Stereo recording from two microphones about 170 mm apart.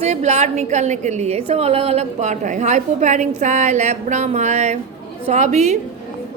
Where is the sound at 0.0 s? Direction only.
40° right (ahead or behind).